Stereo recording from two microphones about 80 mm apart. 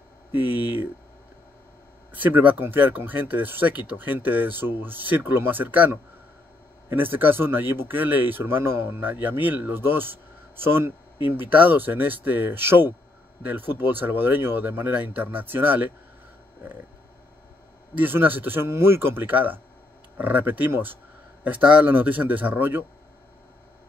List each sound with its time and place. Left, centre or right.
0.3 s speech: right
2.1 s speech: right
6.9 s speech: right
17.9 s speech: right